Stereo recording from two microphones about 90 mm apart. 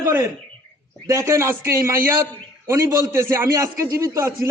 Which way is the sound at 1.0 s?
35° right (ahead or behind).